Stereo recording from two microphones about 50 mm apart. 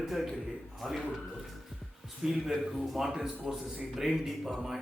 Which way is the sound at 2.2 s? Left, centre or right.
Centre.